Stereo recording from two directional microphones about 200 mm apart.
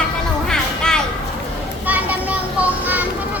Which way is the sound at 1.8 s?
10° right (ahead or behind).